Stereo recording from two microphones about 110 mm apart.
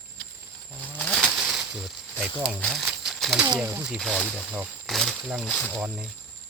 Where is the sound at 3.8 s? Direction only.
5° right (ahead or behind).